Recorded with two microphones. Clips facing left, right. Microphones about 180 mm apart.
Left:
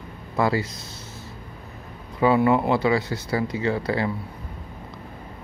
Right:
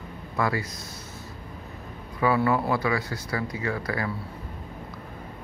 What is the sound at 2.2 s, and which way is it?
Speech, 25° left (ahead or behind).